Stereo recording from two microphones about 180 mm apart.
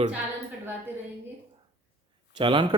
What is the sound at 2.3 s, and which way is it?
Speech, 25° right (ahead or behind).